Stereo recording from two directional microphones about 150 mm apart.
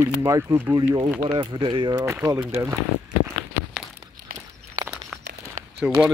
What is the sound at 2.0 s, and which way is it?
Speech, 20° right (ahead or behind).